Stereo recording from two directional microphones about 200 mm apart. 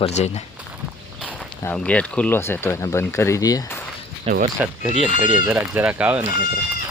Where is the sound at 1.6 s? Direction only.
10° left (ahead or behind).